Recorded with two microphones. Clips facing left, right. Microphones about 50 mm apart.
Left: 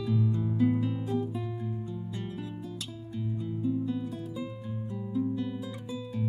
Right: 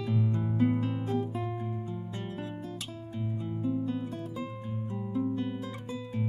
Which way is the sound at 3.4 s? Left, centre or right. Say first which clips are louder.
Left 1 dB; right.